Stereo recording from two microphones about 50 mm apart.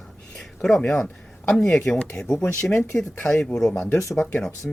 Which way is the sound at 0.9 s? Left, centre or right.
Left.